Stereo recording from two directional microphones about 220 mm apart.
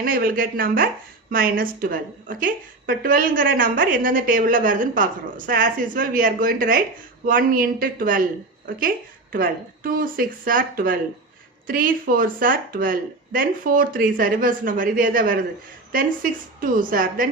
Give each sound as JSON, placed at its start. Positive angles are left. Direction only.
{"t": 0.0, "sound": "a woman's voice", "side_deg": -40}